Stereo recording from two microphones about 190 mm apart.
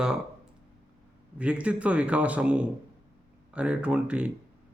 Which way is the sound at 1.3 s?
5° right (ahead or behind).